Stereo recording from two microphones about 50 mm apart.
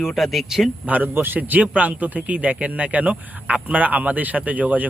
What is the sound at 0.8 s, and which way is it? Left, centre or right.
Speech, right.